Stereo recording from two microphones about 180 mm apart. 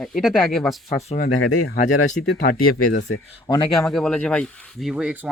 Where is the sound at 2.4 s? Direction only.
50° left (ahead or behind).